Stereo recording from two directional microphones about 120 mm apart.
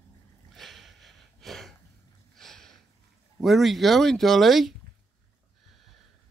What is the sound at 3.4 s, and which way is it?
Speech, centre (ahead or behind).